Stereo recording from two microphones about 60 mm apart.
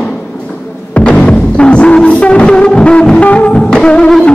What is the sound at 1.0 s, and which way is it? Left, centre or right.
Music, centre.